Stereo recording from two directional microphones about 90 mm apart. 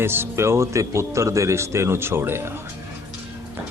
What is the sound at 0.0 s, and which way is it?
A man's voice, 25° right (ahead or behind).